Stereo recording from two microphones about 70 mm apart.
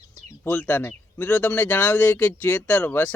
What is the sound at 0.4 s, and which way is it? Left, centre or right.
A man's voice, left.